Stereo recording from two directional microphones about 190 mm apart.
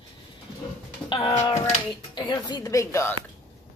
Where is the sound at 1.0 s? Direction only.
25° left (ahead or behind).